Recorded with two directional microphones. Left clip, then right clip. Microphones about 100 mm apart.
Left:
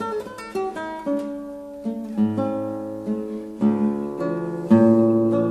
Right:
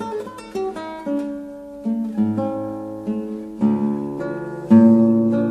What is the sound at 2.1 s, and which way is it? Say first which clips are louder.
Music: left 1 dB; 15° left (ahead or behind).